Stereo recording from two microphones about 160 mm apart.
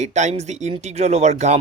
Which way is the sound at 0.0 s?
45° right (ahead or behind).